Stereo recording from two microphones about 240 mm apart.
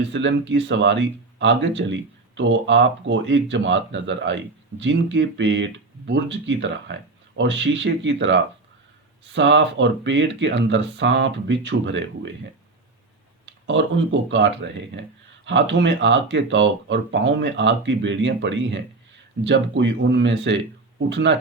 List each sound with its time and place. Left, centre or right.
0.1 s speech: right
13.4 s speech: right